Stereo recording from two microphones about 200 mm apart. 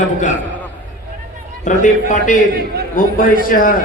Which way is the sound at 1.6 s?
40° left (ahead or behind).